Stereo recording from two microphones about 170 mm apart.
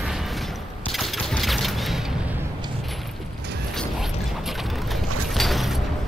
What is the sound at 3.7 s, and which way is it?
Mechanisms, centre (ahead or behind).